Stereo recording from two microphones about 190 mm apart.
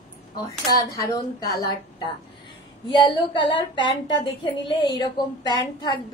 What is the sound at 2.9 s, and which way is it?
A woman's voice, 25° left (ahead or behind).